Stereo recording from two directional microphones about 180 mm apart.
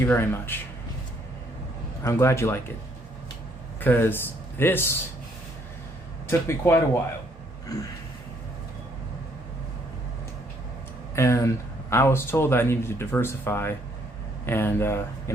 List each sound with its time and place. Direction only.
0.0 s speech: 10° left (ahead or behind)
2.0 s speech: 15° left (ahead or behind)
3.8 s speech: 10° left (ahead or behind)
6.5 s speech: 15° left (ahead or behind)
11.1 s speech: 15° left (ahead or behind)